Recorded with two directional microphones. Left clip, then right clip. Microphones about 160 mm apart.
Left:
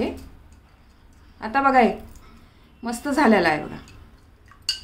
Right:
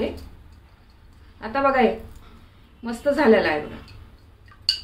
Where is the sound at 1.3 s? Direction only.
90° left.